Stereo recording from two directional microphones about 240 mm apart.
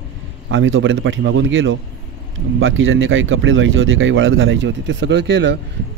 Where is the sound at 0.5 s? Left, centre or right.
Right.